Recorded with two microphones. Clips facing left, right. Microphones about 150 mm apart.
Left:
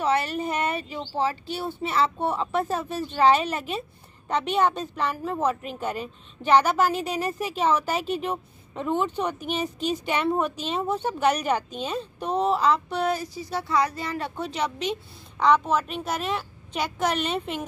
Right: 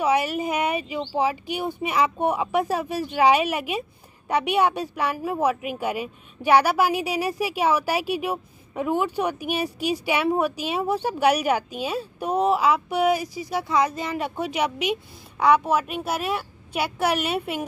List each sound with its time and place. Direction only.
0.0 s a woman's voice: 10° right (ahead or behind)